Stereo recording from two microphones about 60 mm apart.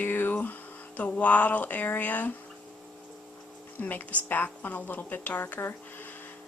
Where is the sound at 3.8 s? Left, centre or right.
Left.